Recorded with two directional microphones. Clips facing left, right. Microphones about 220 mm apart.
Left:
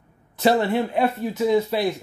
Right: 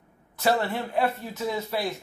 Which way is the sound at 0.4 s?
20° left (ahead or behind).